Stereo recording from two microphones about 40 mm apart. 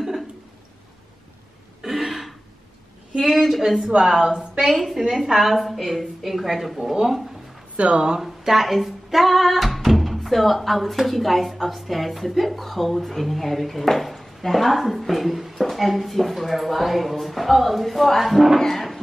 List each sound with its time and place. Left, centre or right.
1.8 s throat clearing: centre
3.2 s a woman's voice: centre
4.6 s a woman's voice: centre
7.7 s speech: right
8.2 s speech: centre
18.6 s music: centre